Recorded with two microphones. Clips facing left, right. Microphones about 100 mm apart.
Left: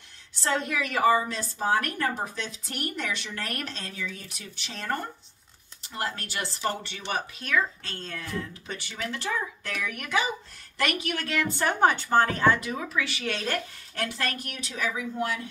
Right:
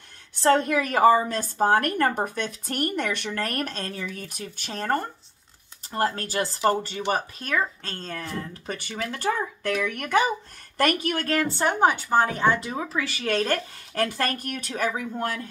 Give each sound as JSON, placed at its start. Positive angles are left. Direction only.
{"t": 0.4, "sound": "a woman's voice", "side_deg": -45}
{"t": 8.7, "sound": "a woman's voice", "side_deg": -45}
{"t": 11.5, "sound": "speech", "side_deg": -15}